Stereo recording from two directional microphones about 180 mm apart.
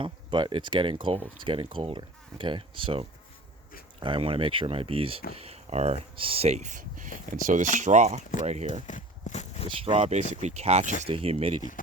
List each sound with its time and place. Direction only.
0.0 s speech: 25° right (ahead or behind)
8.9 s walk: 45° left (ahead or behind)
9.6 s speech: 30° right (ahead or behind)